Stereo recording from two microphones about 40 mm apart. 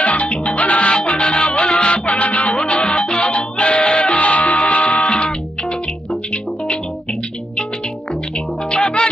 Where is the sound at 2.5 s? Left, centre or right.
Left.